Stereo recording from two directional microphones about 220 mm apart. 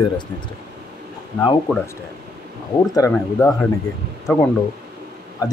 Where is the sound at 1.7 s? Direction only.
5° left (ahead or behind).